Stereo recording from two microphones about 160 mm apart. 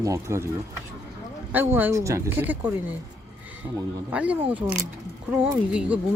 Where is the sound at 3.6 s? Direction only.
20° right (ahead or behind).